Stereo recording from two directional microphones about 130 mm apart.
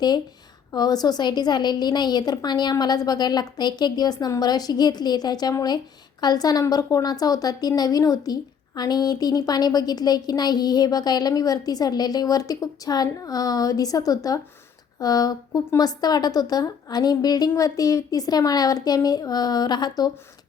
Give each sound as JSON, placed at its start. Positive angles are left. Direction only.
{"t": 0.7, "sound": "a woman's voice", "side_deg": 30}